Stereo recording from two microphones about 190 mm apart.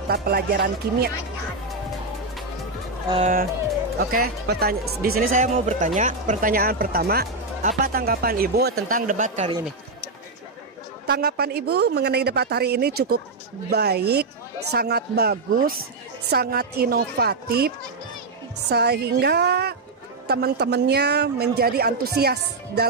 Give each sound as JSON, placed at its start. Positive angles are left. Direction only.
{"t": 0.1, "sound": "speech", "side_deg": -55}
{"t": 4.0, "sound": "speech", "side_deg": -55}
{"t": 11.1, "sound": "speech", "side_deg": -60}